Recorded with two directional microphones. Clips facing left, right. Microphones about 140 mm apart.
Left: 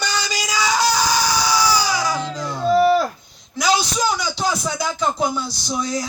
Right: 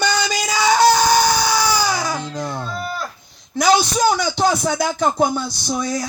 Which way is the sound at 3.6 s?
55° right (ahead or behind).